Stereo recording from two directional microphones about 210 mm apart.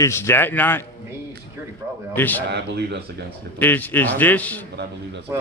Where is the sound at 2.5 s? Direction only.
50° right (ahead or behind).